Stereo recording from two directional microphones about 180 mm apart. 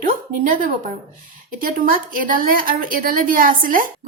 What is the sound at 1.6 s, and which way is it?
A woman's voice, 50° right (ahead or behind).